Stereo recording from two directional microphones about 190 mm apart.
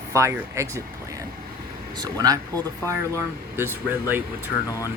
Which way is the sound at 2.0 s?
20° right (ahead or behind).